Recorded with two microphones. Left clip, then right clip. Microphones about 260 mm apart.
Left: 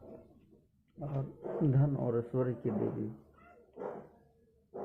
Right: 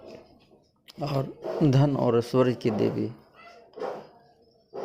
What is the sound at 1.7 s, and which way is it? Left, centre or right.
Speech, right.